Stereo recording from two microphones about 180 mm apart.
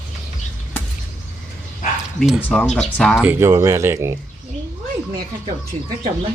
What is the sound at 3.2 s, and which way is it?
Speech, 10° right (ahead or behind).